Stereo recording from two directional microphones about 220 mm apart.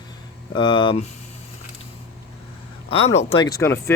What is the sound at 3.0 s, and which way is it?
Speech, 30° left (ahead or behind).